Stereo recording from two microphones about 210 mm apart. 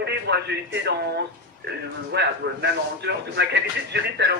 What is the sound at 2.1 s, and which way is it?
Speech, 50° right (ahead or behind).